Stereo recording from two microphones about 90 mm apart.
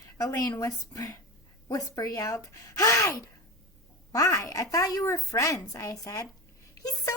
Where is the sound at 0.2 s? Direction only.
45° left (ahead or behind).